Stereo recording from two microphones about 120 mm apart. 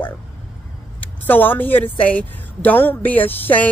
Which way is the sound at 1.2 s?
15° left (ahead or behind).